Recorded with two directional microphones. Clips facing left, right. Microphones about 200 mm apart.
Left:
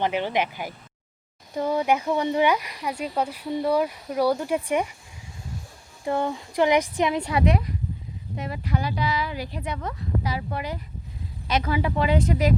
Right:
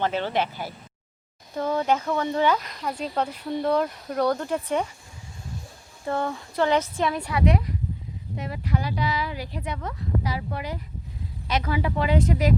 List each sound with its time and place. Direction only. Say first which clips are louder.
0.0 s speech: left 1 dB; 15° left (ahead or behind)
6.1 s speech: left 2 dB; 15° left (ahead or behind)